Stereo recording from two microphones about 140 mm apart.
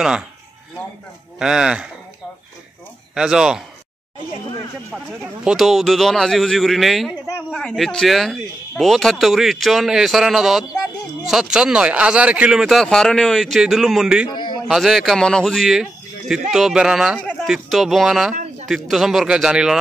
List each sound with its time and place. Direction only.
1.4 s speech: 5° right (ahead or behind)
3.2 s speech: 5° right (ahead or behind)
4.9 s speech: 5° right (ahead or behind)
14.3 s a sound: 35° left (ahead or behind)
14.7 s speech: centre (ahead or behind)
18.3 s a sound: 55° right (ahead or behind)
18.7 s speech: centre (ahead or behind)